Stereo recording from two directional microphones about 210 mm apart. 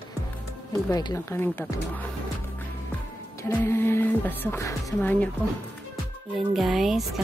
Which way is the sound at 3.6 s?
10° left (ahead or behind).